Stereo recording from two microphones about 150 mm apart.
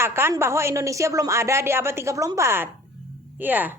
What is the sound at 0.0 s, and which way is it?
A woman's voice, 15° right (ahead or behind).